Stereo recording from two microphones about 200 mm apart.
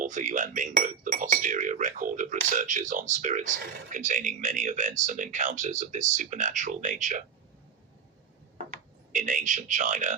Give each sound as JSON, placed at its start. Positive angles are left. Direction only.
{"t": 0.0, "sound": "speech", "side_deg": -40}
{"t": 9.1, "sound": "speech", "side_deg": -40}